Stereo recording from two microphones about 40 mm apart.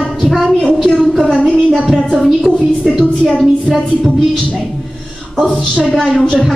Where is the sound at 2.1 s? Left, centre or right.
Centre.